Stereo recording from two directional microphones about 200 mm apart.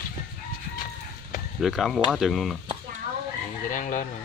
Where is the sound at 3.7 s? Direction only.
40° left (ahead or behind).